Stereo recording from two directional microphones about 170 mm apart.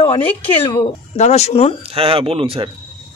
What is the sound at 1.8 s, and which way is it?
Speech, 35° right (ahead or behind).